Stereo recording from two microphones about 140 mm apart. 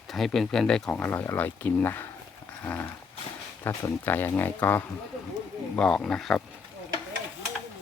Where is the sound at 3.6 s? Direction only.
15° left (ahead or behind).